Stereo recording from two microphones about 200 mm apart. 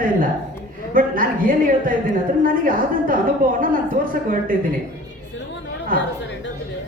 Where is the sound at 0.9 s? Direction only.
45° right (ahead or behind).